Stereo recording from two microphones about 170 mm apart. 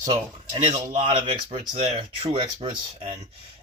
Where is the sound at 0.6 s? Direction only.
40° right (ahead or behind).